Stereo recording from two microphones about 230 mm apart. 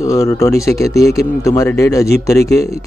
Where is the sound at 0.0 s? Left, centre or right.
Centre.